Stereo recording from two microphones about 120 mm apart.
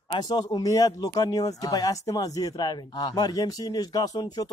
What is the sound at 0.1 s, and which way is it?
A man's voice, 35° left (ahead or behind).